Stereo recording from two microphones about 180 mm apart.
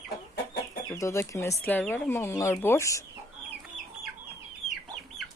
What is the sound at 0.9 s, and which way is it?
Speech, 15° left (ahead or behind).